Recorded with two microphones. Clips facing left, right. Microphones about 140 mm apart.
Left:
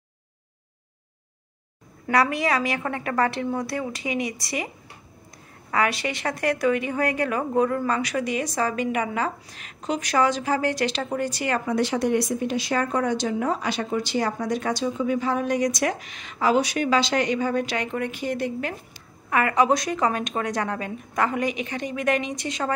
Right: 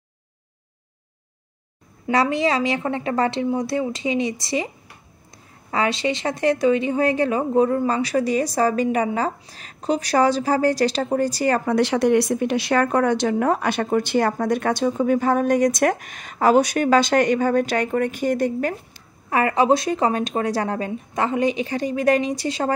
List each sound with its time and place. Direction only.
2.0 s a woman's voice: 25° right (ahead or behind)
5.7 s a woman's voice: 25° right (ahead or behind)
11.6 s speech: 75° right (ahead or behind); by 18.8 s 45° right (ahead or behind)
19.3 s a woman's voice: 30° right (ahead or behind)